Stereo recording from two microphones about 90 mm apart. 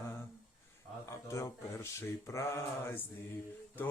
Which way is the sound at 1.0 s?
35° left (ahead or behind).